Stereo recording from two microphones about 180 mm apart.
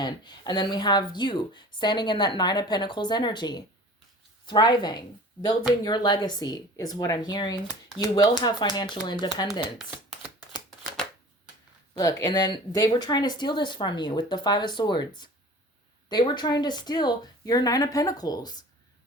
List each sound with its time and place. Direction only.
0.0 s speech: 25° left (ahead or behind)
11.9 s speech: 20° left (ahead or behind)